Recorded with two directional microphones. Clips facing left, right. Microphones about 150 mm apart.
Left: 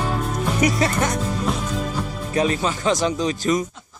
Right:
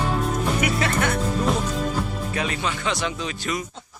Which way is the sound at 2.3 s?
35° left (ahead or behind).